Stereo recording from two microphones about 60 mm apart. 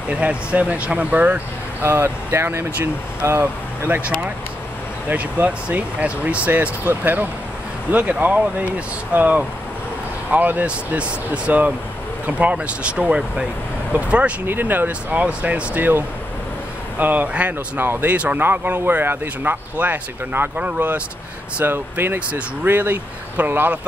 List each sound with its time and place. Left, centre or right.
0.1 s speech: centre
1.9 s speech: right
5.1 s speech: right
14.4 s speech: right
14.9 s speech: right
17.0 s speech: right